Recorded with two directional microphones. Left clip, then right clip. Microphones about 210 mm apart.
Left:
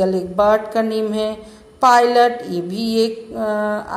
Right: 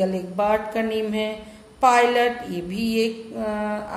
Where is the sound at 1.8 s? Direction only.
25° left (ahead or behind).